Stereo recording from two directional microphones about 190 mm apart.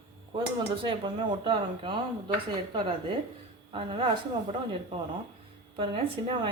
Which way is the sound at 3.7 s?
30° right (ahead or behind).